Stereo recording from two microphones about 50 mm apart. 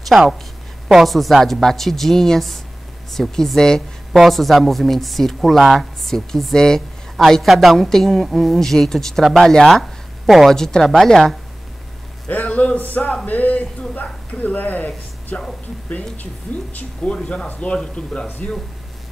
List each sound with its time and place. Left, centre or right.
0.1 s a woman's voice: centre
4.1 s a woman's voice: centre
12.3 s a sound: left
12.8 s speech: left
16.7 s speech: left
17.2 s a woman's voice: centre